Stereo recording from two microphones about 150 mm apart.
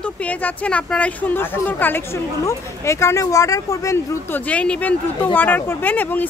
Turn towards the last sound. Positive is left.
turn(degrees=10)  # may be behind; listen again after turning